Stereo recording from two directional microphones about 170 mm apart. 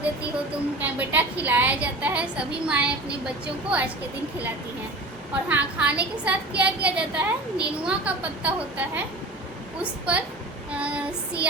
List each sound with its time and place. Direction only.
0.2 s a woman's voice: 10° right (ahead or behind)
5.5 s a woman's voice: 10° right (ahead or behind)